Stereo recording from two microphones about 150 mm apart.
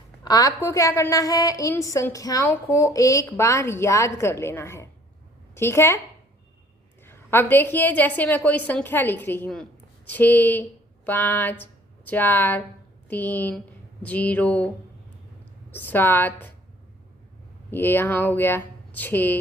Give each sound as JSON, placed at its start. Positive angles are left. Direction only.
{"t": 0.3, "sound": "a woman's voice", "side_deg": 25}
{"t": 7.0, "sound": "a woman's voice", "side_deg": 15}
{"t": 15.7, "sound": "speech", "side_deg": 15}
{"t": 17.7, "sound": "speech", "side_deg": 15}